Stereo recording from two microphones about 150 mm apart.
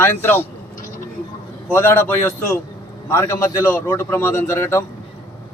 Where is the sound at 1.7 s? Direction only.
15° left (ahead or behind).